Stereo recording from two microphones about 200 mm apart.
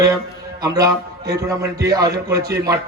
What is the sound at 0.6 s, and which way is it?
Speech, 20° right (ahead or behind).